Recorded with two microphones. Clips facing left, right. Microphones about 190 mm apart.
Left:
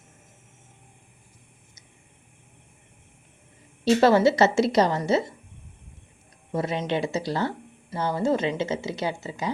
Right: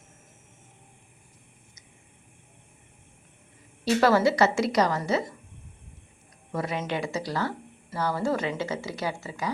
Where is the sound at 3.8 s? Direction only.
25° left (ahead or behind).